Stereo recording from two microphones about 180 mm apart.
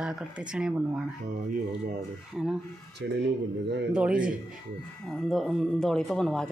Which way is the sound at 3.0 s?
65° right (ahead or behind).